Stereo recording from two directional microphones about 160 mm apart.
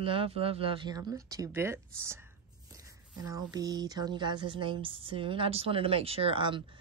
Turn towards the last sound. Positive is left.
turn(degrees=-30)  # may be behind; listen again after turning